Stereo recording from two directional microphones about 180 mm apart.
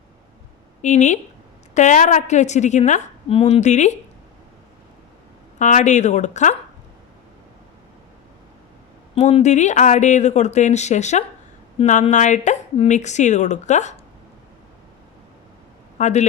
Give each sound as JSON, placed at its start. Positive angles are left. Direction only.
{"t": 0.8, "sound": "a woman's voice", "side_deg": 40}
{"t": 5.5, "sound": "a woman's voice", "side_deg": 40}
{"t": 9.1, "sound": "a woman's voice", "side_deg": 40}
{"t": 16.0, "sound": "speech", "side_deg": 40}